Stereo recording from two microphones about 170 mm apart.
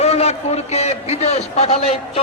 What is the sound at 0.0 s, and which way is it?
A man's voice, 40° left (ahead or behind).